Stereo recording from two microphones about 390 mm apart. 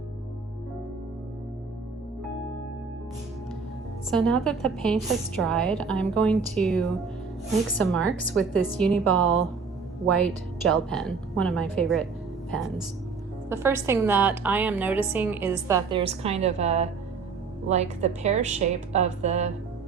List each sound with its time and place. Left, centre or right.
4.1 s a woman's voice: centre